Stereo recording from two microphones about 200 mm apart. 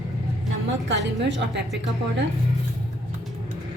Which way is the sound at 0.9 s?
60° right (ahead or behind).